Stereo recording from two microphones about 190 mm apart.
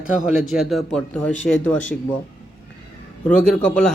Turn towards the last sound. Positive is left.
turn(degrees=5)  # may be behind; listen again after turning